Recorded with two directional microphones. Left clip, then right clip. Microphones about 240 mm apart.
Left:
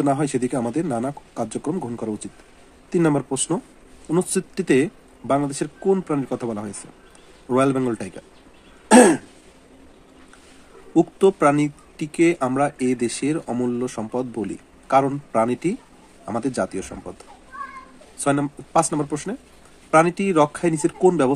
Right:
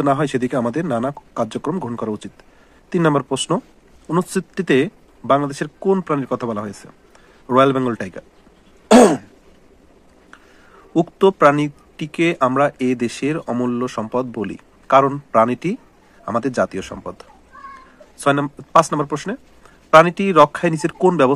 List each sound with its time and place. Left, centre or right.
0.0 s speech: right
4.1 s speech: centre
4.6 s speech: centre
11.0 s speech: centre
18.2 s speech: centre